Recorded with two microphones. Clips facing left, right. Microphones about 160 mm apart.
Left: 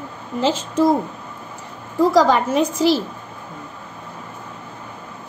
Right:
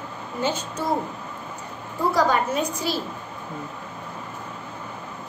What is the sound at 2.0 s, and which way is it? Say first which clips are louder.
A woman's voice: left 6 dB; 90° left.